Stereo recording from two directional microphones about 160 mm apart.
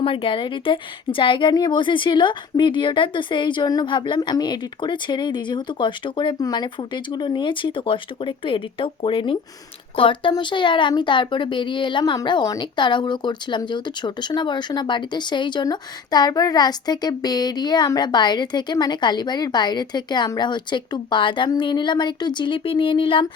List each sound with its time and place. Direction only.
0.0 s a woman's voice: 35° left (ahead or behind)